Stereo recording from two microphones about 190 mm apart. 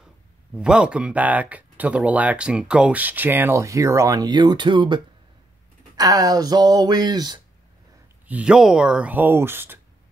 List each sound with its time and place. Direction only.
0.6 s speech: 5° right (ahead or behind); by 7.3 s 20° right (ahead or behind)
8.3 s speech: 5° right (ahead or behind)